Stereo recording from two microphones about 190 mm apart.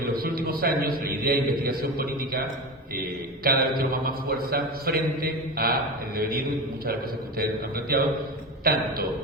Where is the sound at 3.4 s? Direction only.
55° right (ahead or behind).